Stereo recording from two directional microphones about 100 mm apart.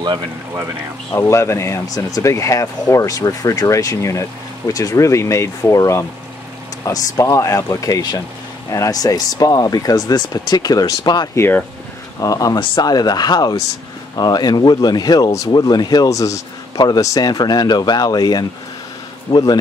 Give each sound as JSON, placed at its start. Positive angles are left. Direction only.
{"t": 1.1, "sound": "speech", "side_deg": 25}
{"t": 11.3, "sound": "speech", "side_deg": 20}
{"t": 12.2, "sound": "speech", "side_deg": 35}